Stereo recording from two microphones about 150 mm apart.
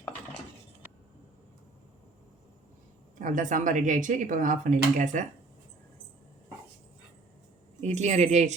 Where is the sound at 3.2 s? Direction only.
60° right (ahead or behind).